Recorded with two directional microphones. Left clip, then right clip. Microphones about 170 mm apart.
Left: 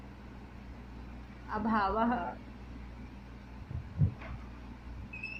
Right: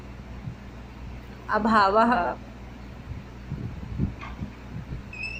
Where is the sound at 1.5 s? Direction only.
30° right (ahead or behind).